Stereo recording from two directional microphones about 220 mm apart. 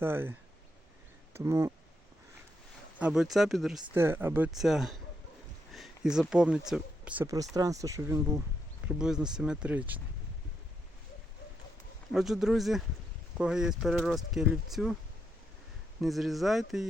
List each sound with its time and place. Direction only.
0.0 s speech: 10° right (ahead or behind)
3.0 s speech: centre (ahead or behind)
12.1 s speech: centre (ahead or behind)
16.0 s speech: centre (ahead or behind)